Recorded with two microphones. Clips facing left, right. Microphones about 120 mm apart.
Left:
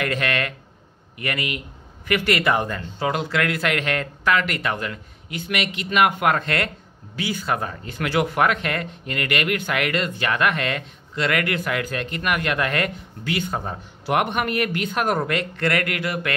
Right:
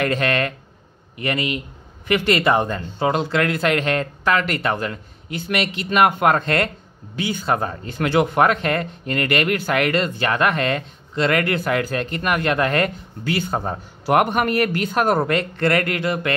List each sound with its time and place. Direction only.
0.0 s a man's voice: 35° right (ahead or behind)